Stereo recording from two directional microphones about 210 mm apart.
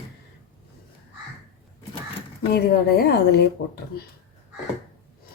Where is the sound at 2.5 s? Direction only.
50° left (ahead or behind).